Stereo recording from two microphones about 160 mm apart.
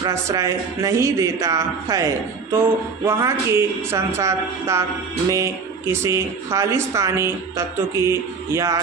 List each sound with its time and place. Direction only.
0.0 s a woman's voice: 20° right (ahead or behind)
5.9 s a woman's voice: 20° right (ahead or behind)